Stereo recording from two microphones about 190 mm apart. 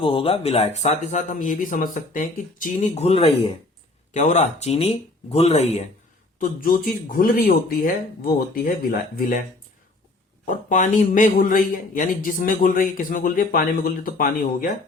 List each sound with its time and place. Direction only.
0.0 s speech: 30° left (ahead or behind)
6.4 s a man's voice: 45° left (ahead or behind)
10.5 s a man's voice: 40° left (ahead or behind)